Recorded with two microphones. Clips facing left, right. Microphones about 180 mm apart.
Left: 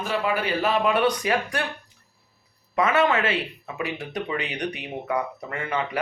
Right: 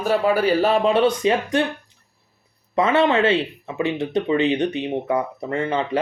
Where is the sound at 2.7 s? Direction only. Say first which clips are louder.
Right 4 dB; 25° right (ahead or behind).